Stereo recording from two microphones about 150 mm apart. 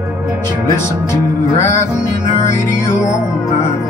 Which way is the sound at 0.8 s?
20° left (ahead or behind).